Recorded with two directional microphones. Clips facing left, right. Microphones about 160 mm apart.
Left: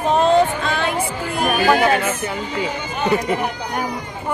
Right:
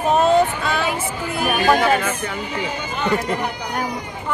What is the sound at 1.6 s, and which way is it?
Speech, 10° left (ahead or behind).